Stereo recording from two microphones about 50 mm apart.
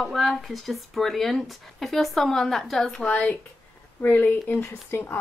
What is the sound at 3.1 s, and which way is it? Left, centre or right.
Speech, left.